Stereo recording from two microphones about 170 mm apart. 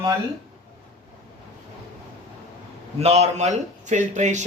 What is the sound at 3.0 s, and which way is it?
Speech, 40° right (ahead or behind).